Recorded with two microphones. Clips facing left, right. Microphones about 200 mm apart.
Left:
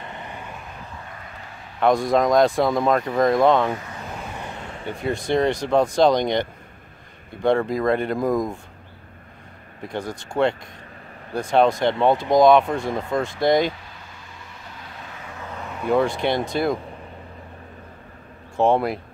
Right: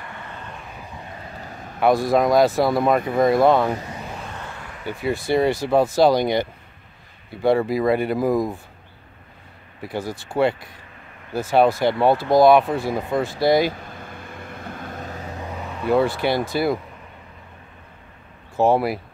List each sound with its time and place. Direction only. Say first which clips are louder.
0.0 s vehicle: left 1 dB; 20° left (ahead or behind)
1.8 s speech: right 1 dB; 5° right (ahead or behind)
4.0 s vehicle: even; centre (ahead or behind)
4.3 s vehicle: left 2 dB; 15° left (ahead or behind)
4.8 s speech: right 1 dB; 5° right (ahead or behind)
9.8 s speech: right 1 dB; 5° right (ahead or behind)
13.8 s vehicle: right 7 dB; 55° right (ahead or behind)
15.5 s speech: right 1 dB; 5° right (ahead or behind)
18.6 s speech: right 1 dB; 5° right (ahead or behind)